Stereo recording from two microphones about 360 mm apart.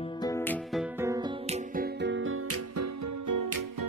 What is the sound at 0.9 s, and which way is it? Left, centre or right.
Music, centre.